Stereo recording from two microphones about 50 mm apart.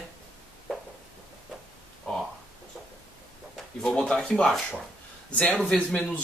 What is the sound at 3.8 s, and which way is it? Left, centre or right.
Speech, centre.